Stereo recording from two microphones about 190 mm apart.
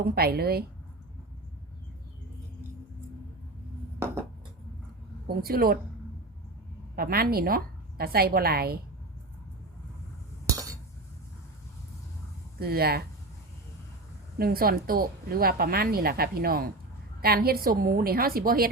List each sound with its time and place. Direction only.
0.0 s a woman's voice: 55° right (ahead or behind)
5.4 s speech: 50° right (ahead or behind)
6.9 s speech: 50° right (ahead or behind)
10.5 s chink: 20° right (ahead or behind)
12.5 s speech: 55° right (ahead or behind)
14.3 s speech: 50° right (ahead or behind)